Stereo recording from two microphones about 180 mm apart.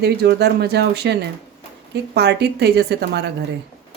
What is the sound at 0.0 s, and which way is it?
A woman's voice, 60° right (ahead or behind).